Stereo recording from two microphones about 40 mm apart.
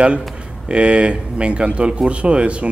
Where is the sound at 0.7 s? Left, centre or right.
Right.